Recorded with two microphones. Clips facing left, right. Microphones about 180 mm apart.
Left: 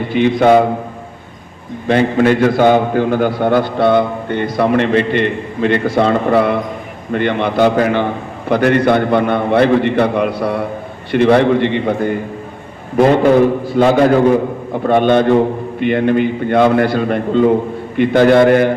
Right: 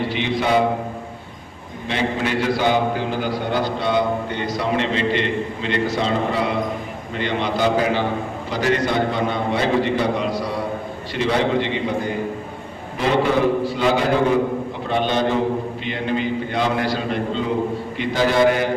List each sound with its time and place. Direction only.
0.1 s a man's voice: 50° left (ahead or behind)
1.9 s a man's voice: 55° left (ahead or behind)